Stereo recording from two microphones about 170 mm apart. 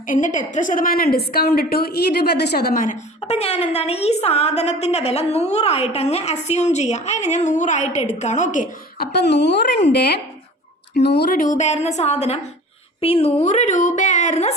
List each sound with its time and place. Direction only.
0.1 s a woman's voice: 45° left (ahead or behind)
3.2 s a woman's voice: 40° left (ahead or behind)
9.1 s a woman's voice: 80° left
11.3 s a woman's voice: 45° left (ahead or behind)